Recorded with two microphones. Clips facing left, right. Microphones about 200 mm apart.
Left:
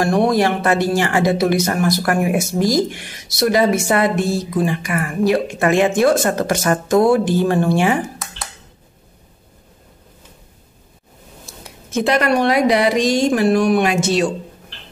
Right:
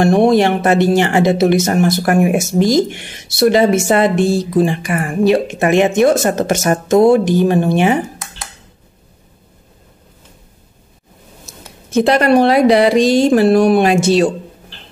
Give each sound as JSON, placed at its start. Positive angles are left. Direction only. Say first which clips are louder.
{"t": 0.0, "sound": "speech", "louder": "right 5 dB", "side_deg": -25}
{"t": 11.5, "sound": "a sound", "louder": "right 1 dB", "side_deg": -20}
{"t": 12.1, "sound": "speech", "louder": "right 4 dB", "side_deg": -35}